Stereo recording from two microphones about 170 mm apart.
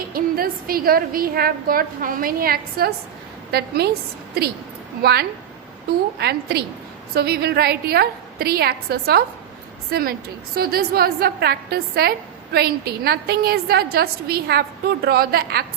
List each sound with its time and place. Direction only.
0.1 s a woman's voice: 60° right (ahead or behind)
6.1 s a woman's voice: 70° right (ahead or behind)